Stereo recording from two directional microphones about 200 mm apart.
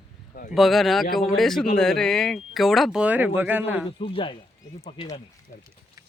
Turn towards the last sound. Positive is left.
turn(degrees=20)  # may be behind; listen again after turning